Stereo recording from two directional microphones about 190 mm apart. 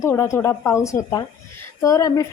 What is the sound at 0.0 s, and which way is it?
Speech, 15° left (ahead or behind).